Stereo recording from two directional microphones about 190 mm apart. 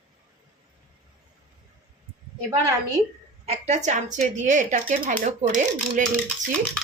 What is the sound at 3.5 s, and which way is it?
Speech, 35° right (ahead or behind).